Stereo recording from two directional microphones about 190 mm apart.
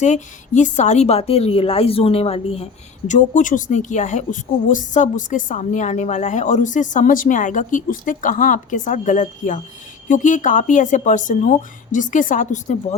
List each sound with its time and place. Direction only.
0.0 s a woman's voice: 40° left (ahead or behind)